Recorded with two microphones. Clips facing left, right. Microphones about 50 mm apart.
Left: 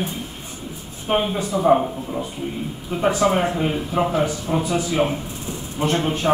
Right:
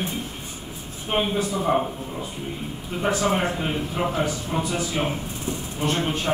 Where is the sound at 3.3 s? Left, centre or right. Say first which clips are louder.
Left 4 dB; centre.